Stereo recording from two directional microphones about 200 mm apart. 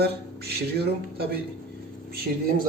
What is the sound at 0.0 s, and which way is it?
Music, 55° right (ahead or behind).